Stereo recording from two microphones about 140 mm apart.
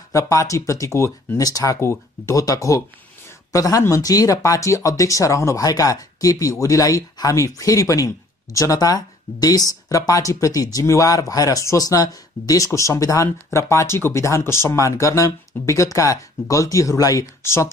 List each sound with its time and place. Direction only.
0.1 s speech: 20° left (ahead or behind)